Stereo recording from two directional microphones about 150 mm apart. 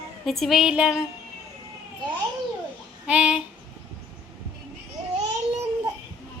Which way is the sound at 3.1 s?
5° right (ahead or behind).